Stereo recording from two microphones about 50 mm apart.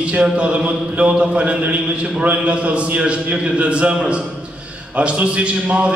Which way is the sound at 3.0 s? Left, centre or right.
Right.